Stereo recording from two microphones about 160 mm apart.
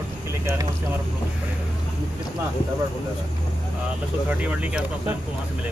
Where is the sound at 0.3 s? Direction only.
15° right (ahead or behind).